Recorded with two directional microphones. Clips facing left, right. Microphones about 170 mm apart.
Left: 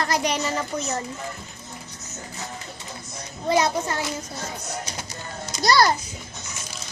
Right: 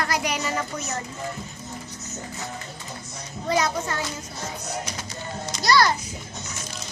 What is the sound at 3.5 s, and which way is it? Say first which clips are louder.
Speech: left 3 dB; 30° left (ahead or behind).